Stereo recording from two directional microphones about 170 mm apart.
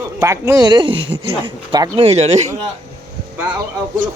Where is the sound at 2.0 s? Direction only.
40° right (ahead or behind).